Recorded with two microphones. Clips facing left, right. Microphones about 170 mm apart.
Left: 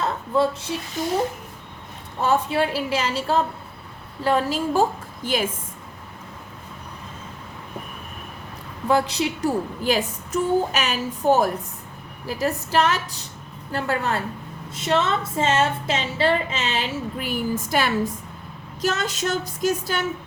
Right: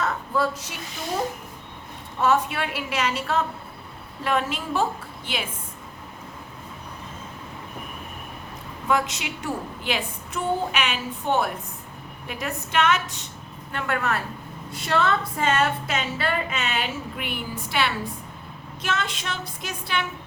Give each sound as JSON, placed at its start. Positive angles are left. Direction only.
{"t": 0.0, "sound": "speech", "side_deg": 30}
{"t": 2.2, "sound": "a woman's voice", "side_deg": 30}
{"t": 8.9, "sound": "a woman's voice", "side_deg": 35}